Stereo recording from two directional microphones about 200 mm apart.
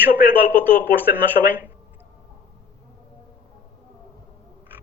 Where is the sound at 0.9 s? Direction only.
10° right (ahead or behind).